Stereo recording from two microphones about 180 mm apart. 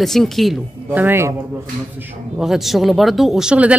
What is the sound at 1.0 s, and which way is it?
Speech, 15° right (ahead or behind).